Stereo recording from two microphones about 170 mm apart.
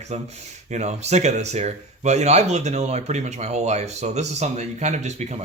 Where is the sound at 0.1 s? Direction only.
40° right (ahead or behind).